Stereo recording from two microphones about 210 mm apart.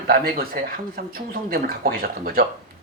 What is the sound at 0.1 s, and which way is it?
Speech, 45° right (ahead or behind).